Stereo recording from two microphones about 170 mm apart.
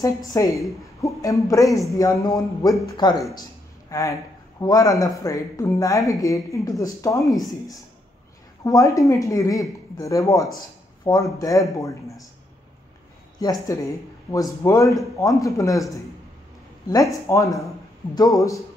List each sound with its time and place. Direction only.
0.0 s speech: 20° left (ahead or behind)
8.6 s speech: 20° left (ahead or behind)
13.4 s speech: 25° left (ahead or behind)
16.8 s speech: 20° left (ahead or behind)